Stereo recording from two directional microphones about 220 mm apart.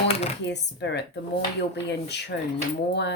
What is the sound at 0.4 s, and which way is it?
Speech, 50° left (ahead or behind).